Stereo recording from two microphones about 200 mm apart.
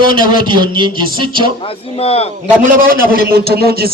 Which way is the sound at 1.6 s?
30° left (ahead or behind).